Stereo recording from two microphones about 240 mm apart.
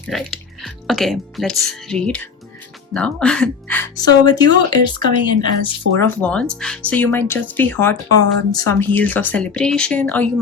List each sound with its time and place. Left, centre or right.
0.1 s speech: centre
6.1 s speech: centre